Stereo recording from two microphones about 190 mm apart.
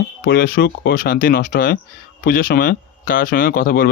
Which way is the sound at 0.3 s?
50° left (ahead or behind).